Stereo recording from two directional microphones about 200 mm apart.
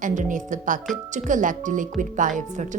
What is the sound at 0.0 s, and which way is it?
A woman's voice, 40° right (ahead or behind).